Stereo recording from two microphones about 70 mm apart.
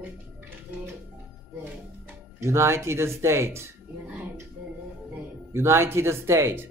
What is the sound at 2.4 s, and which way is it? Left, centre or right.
A man's voice, right.